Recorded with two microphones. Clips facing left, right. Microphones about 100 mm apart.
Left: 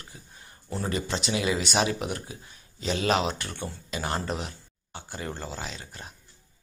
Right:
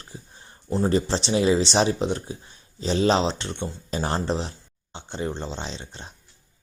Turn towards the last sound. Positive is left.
turn(degrees=-25)  # may be behind; listen again after turning